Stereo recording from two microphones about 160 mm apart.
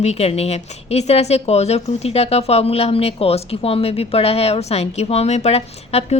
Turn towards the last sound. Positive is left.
turn(degrees=40)  # may be behind; listen again after turning